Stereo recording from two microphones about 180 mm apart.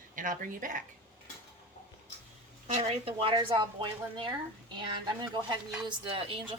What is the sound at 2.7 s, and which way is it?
Speech, 35° right (ahead or behind).